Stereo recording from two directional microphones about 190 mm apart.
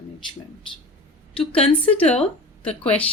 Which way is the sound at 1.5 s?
30° left (ahead or behind).